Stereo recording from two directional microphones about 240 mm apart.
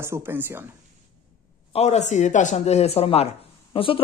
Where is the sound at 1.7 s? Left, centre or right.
Left.